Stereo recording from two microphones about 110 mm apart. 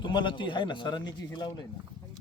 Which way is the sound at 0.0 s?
45° left (ahead or behind).